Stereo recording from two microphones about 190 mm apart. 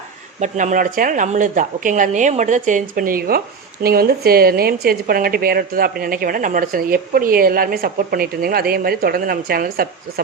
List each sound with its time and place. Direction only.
0.3 s speech: 40° right (ahead or behind)